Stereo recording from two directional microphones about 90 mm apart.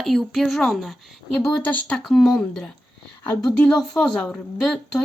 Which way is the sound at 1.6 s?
15° left (ahead or behind).